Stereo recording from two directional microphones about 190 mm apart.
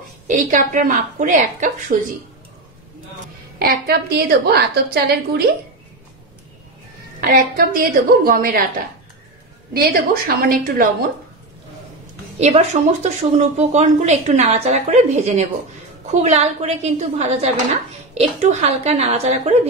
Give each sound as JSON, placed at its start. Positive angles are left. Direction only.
{"t": 0.3, "sound": "a woman's voice", "side_deg": -40}
{"t": 3.5, "sound": "a woman's voice", "side_deg": -55}
{"t": 7.2, "sound": "a woman's voice", "side_deg": -50}
{"t": 9.8, "sound": "a woman's voice", "side_deg": -50}
{"t": 12.4, "sound": "speech", "side_deg": -35}